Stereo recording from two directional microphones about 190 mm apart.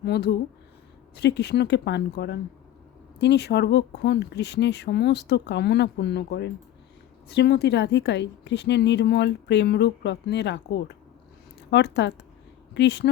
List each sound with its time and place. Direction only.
0.0 s a woman's voice: 60° left (ahead or behind)